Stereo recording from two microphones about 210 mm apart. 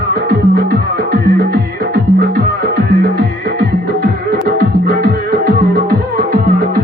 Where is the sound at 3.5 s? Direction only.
45° right (ahead or behind).